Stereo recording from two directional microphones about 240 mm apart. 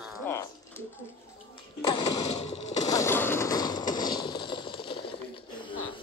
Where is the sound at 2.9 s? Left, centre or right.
Centre.